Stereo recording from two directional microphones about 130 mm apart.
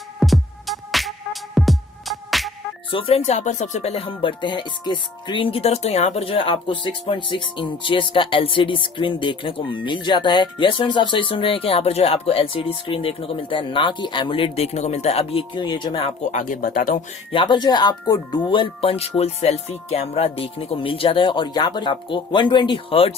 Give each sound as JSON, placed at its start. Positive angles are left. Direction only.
{"t": 0.2, "sound": "music", "side_deg": 0}
{"t": 2.9, "sound": "speech", "side_deg": 45}
{"t": 16.3, "sound": "speech", "side_deg": 85}
{"t": 17.3, "sound": "speech", "side_deg": 35}